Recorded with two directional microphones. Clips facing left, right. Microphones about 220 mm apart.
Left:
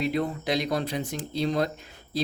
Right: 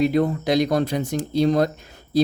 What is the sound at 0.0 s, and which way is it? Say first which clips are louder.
Speech: right 8 dB; 45° right (ahead or behind).